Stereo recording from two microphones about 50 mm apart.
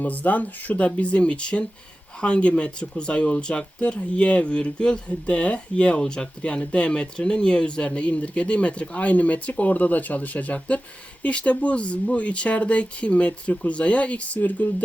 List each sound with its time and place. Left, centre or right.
0.0 s speech: left